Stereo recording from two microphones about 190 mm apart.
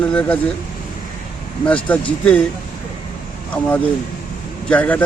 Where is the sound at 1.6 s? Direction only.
5° left (ahead or behind).